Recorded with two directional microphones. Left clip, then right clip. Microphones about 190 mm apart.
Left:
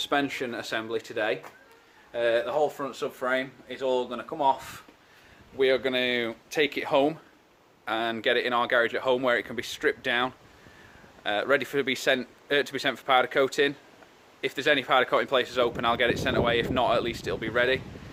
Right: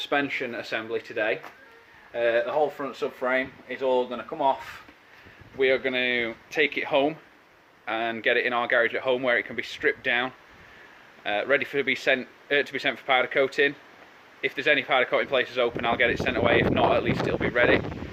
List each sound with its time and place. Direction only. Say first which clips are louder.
0.1 s speech: right 3 dB; 15° left (ahead or behind)
5.5 s speech: right 1 dB; 20° left (ahead or behind)